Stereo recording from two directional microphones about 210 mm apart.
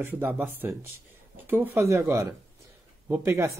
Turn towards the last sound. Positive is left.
turn(degrees=-10)  # may be behind; listen again after turning